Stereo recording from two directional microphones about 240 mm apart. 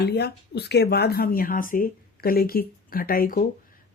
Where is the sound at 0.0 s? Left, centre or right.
Left.